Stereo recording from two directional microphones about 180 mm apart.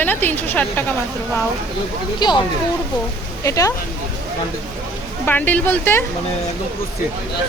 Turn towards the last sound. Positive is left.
turn(degrees=10)  # may be behind; listen again after turning